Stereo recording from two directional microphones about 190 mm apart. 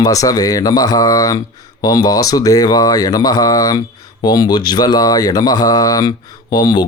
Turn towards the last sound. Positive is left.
turn(degrees=20)  # may be behind; listen again after turning